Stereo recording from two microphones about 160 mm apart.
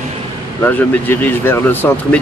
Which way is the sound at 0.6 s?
10° left (ahead or behind).